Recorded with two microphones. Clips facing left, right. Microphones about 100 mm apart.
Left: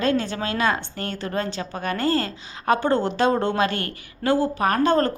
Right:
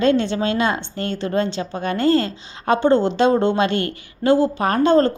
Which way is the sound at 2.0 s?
40° left (ahead or behind).